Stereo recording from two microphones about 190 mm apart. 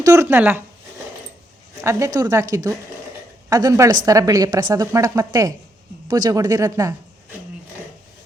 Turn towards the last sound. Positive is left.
turn(degrees=-15)  # may be behind; listen again after turning